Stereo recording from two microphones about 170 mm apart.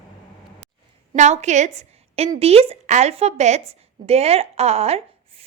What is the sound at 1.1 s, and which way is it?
A woman's voice, 45° right (ahead or behind).